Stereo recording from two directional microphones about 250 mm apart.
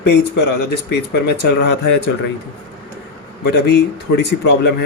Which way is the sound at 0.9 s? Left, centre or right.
Left.